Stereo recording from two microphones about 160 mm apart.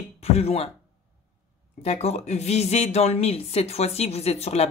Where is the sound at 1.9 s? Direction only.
45° left (ahead or behind).